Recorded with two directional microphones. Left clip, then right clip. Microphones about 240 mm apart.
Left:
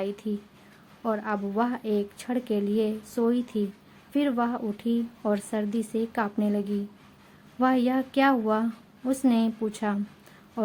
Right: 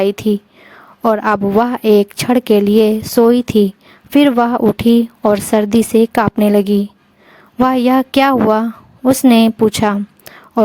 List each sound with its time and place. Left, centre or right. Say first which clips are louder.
0.0 s speech: right 17 dB; right